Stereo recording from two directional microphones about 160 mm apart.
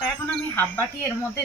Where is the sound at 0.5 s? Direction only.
10° left (ahead or behind).